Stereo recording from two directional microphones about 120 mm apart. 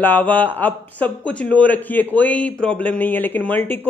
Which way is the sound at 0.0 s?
15° left (ahead or behind).